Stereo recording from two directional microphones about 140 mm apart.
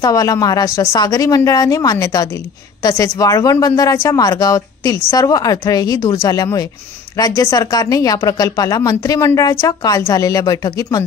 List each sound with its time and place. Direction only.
0.0 s speech: 25° left (ahead or behind)